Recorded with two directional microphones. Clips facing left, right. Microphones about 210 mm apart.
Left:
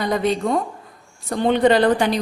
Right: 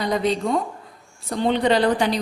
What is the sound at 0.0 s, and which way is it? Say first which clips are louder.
A woman's voice: left 1 dB; 50° left (ahead or behind).